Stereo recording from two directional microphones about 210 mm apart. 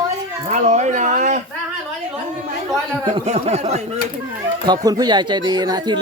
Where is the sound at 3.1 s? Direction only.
30° right (ahead or behind).